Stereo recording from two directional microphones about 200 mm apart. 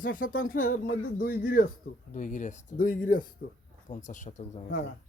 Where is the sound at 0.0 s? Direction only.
45° left (ahead or behind).